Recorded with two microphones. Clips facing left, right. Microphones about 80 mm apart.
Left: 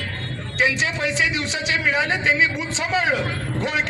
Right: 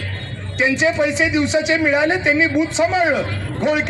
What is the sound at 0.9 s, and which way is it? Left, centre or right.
A man's voice, centre.